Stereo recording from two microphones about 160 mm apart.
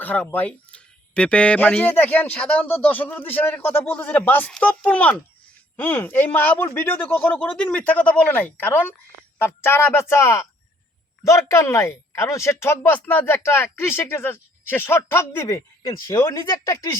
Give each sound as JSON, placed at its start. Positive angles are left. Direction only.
{"t": 0.0, "sound": "speech", "side_deg": 10}